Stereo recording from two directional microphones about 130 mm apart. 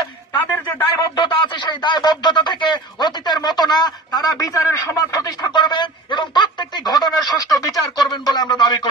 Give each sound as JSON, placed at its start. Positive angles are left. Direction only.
{"t": 0.3, "sound": "speech", "side_deg": 30}